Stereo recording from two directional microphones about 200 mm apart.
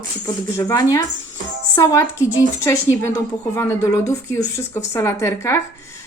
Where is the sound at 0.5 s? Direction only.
15° left (ahead or behind).